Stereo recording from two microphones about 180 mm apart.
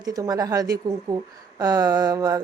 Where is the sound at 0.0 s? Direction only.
20° right (ahead or behind).